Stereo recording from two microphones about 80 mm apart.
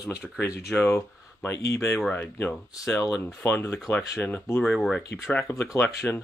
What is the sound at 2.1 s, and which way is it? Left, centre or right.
Speech, left.